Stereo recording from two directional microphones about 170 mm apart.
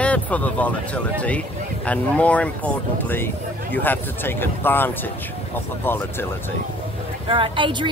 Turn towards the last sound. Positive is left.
turn(degrees=-30)  # may be behind; listen again after turning